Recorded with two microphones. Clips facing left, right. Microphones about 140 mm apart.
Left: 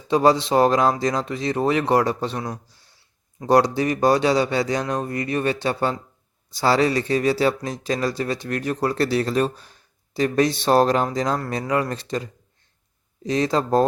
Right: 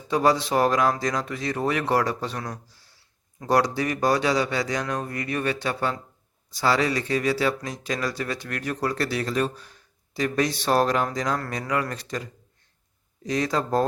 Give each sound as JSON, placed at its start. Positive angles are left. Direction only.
{"t": 0.1, "sound": "speech", "side_deg": 25}